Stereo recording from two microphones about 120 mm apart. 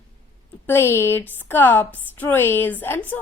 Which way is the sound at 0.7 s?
20° left (ahead or behind).